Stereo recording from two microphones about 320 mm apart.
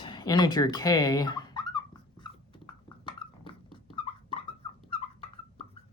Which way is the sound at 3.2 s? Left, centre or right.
Centre.